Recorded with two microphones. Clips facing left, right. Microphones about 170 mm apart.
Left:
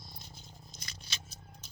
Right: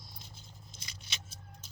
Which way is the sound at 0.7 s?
25° right (ahead or behind).